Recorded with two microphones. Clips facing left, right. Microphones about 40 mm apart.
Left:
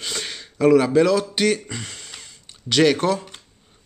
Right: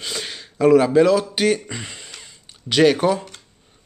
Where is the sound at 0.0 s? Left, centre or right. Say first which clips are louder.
Even; centre.